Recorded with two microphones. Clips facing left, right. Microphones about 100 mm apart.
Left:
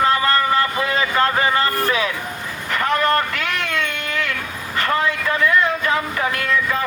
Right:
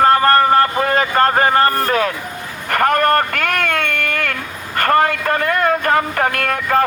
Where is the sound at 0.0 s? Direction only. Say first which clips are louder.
Right 6 dB; 50° right (ahead or behind).